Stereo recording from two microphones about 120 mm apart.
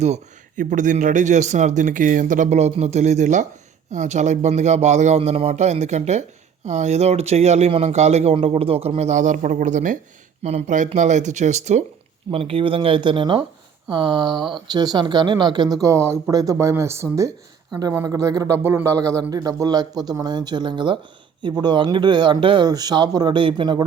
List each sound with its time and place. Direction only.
0.0 s a man's voice: 80° right
10.4 s a man's voice: 80° right
12.3 s speech: 50° right (ahead or behind)